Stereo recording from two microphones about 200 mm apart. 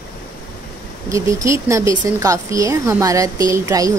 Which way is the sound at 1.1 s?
15° right (ahead or behind).